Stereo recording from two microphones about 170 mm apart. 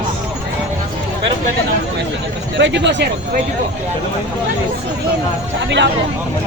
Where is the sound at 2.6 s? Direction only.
90° right.